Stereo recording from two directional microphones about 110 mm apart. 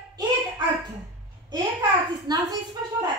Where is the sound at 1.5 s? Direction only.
40° right (ahead or behind).